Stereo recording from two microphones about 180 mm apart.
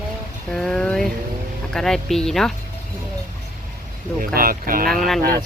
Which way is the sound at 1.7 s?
Centre (ahead or behind).